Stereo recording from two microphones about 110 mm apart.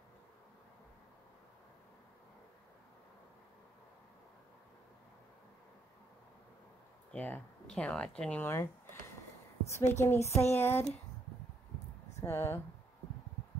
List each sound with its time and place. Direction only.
7.1 s a sound: 15° left (ahead or behind)
7.7 s speech: 10° left (ahead or behind)
9.7 s a woman's voice: 25° left (ahead or behind)
12.2 s speech: 25° left (ahead or behind)